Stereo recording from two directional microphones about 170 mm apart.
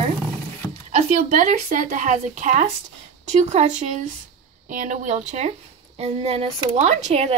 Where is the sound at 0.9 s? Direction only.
50° right (ahead or behind).